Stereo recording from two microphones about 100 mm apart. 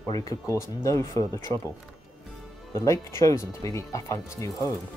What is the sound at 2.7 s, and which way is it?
Speech, 30° left (ahead or behind).